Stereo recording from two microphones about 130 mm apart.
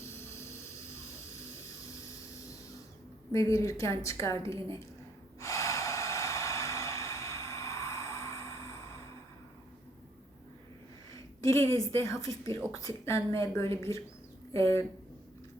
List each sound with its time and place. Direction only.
0.1 s a sound: 20° left (ahead or behind)
3.3 s a woman's voice: 25° left (ahead or behind)
5.4 s snort: 25° left (ahead or behind)
11.1 s a woman's voice: 25° left (ahead or behind)